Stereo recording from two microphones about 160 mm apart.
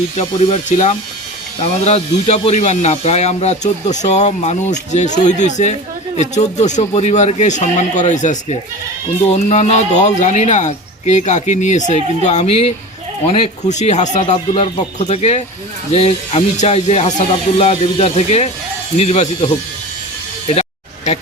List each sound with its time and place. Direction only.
0.2 s speech: 40° left (ahead or behind)
14.2 s speech: 35° left (ahead or behind)
20.5 s music: 45° left (ahead or behind)